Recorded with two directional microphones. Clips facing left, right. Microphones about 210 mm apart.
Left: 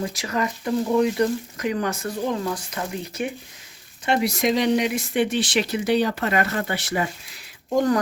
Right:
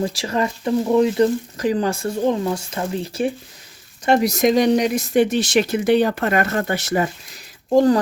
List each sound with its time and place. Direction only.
0.0 s speech: 30° right (ahead or behind)
4.0 s speech: 40° right (ahead or behind)
7.7 s speech: 30° right (ahead or behind)